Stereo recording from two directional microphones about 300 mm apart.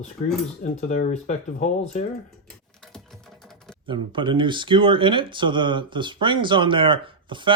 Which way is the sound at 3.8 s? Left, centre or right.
Centre.